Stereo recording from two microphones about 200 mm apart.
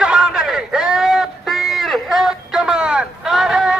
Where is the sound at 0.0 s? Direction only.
5° right (ahead or behind).